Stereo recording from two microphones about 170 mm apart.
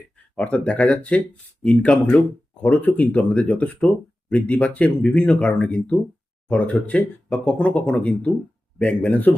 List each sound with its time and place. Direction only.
0.3 s speech: 5° left (ahead or behind)